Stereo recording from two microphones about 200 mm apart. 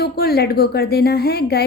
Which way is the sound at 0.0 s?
50° left (ahead or behind).